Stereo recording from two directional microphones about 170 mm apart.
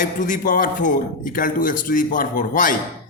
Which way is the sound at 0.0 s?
50° left (ahead or behind).